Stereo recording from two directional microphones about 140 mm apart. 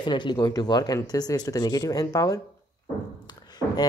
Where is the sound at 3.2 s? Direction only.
30° left (ahead or behind).